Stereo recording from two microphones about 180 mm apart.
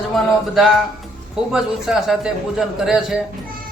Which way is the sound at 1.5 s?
5° right (ahead or behind).